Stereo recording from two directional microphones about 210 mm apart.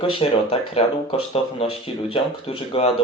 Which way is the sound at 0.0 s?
25° left (ahead or behind).